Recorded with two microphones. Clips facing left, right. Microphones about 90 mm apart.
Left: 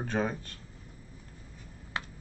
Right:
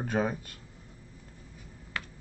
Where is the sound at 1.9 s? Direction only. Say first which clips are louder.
Left 1 dB; 25° left (ahead or behind).